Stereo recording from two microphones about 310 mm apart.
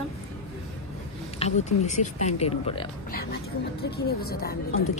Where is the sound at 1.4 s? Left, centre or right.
Left.